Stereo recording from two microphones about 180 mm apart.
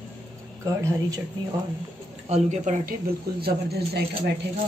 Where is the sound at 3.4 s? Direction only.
65° right (ahead or behind).